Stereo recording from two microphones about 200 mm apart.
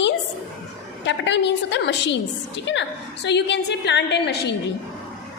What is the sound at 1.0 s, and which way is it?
A woman's voice, 60° left (ahead or behind).